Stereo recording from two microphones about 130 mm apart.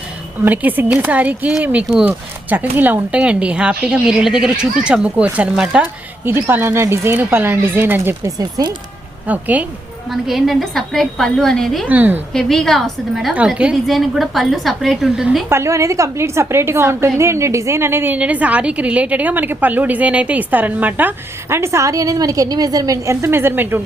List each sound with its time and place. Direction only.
0.4 s a woman's voice: 15° right (ahead or behind)
8.4 s a woman's voice: 30° right (ahead or behind)
9.2 s a woman's voice: 10° right (ahead or behind)
11.9 s a woman's voice: 15° right (ahead or behind)
12.3 s a woman's voice: 5° left (ahead or behind)
15.4 s a woman's voice: 20° right (ahead or behind)